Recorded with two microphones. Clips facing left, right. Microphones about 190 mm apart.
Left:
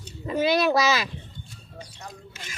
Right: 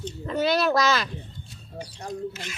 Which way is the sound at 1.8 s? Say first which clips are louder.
Right 7 dB; 35° right (ahead or behind).